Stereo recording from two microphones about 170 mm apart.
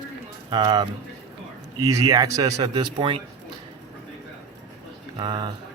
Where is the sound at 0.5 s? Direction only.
25° right (ahead or behind).